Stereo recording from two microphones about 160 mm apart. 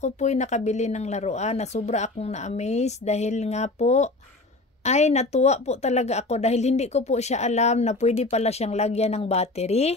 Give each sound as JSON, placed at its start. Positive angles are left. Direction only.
{"t": 0.0, "sound": "a woman's voice", "side_deg": 45}